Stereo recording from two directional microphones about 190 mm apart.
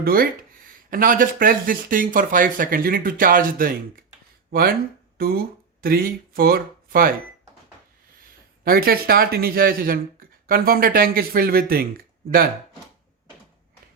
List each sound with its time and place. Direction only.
0.0 s speech: 50° right (ahead or behind)
5.1 s speech: 50° right (ahead or behind)
8.6 s speech: 50° right (ahead or behind)